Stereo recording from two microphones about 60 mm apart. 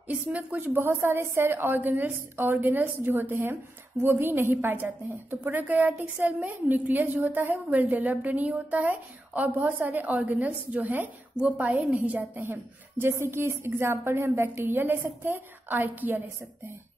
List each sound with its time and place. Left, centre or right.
0.1 s a woman's voice: right
0.7 s a woman's voice: right